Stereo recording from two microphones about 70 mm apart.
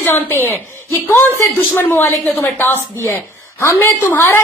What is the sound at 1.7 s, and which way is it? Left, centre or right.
Speech, left.